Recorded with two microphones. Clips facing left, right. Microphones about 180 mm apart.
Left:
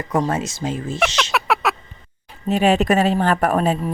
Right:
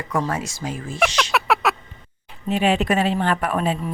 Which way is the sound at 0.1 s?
20° left (ahead or behind).